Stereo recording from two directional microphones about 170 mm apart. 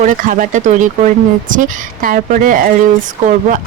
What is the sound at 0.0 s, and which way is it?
Speech, 50° right (ahead or behind).